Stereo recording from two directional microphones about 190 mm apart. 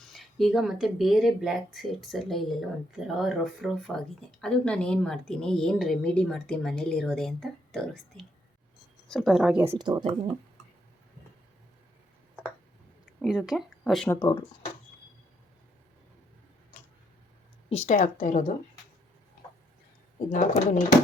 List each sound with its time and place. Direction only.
0.0 s speech: centre (ahead or behind)
9.6 s a woman's voice: 20° right (ahead or behind)
13.2 s speech: 5° right (ahead or behind)
14.2 s speech: 25° left (ahead or behind)
17.7 s speech: 35° left (ahead or behind)
20.3 s speech: 40° left (ahead or behind)